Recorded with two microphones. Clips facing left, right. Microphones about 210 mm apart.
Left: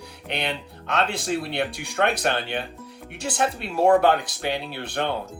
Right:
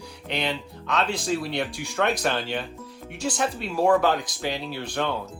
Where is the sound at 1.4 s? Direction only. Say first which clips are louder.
Left 1 dB; 60° left (ahead or behind).